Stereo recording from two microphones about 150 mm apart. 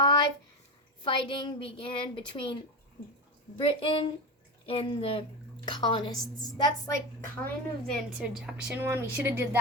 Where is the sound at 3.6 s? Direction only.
35° left (ahead or behind).